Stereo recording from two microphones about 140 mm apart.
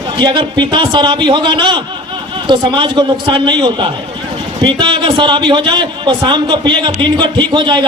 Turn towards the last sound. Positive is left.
turn(degrees=-35)  # may be behind; listen again after turning